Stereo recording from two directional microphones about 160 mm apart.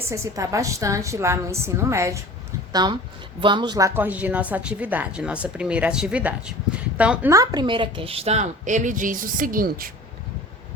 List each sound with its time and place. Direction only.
0.1 s a woman's voice: 20° right (ahead or behind)
7.3 s a woman's voice: 25° right (ahead or behind); by 9.9 s 65° right (ahead or behind)